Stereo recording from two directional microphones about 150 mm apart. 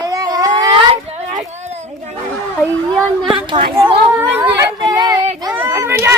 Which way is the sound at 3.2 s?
5° right (ahead or behind).